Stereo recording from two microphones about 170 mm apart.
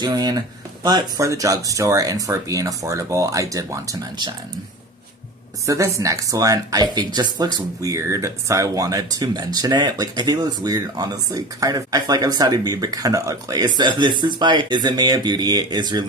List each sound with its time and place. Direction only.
0.0 s speech: 25° right (ahead or behind)
5.6 s speech: 20° right (ahead or behind)